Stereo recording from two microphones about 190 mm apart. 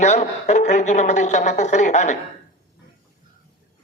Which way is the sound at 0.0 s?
35° left (ahead or behind).